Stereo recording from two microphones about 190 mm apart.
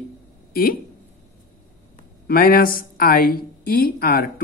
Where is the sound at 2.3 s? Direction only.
50° left (ahead or behind).